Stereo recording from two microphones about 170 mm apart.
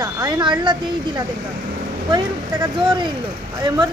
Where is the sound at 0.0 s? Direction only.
25° right (ahead or behind).